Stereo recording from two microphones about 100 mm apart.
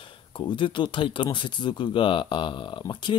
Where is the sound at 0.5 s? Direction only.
55° left (ahead or behind).